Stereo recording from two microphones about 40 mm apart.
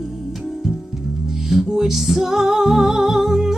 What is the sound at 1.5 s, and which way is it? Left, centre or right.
Music, centre.